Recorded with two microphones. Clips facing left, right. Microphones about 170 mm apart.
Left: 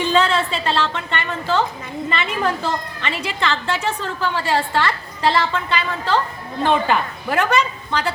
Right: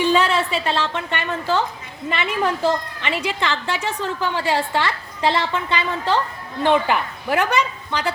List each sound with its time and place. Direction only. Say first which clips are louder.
0.0 s a woman's voice: even; 10° right (ahead or behind)